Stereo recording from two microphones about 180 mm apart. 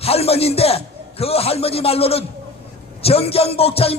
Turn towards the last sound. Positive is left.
turn(degrees=35)  # may be behind; listen again after turning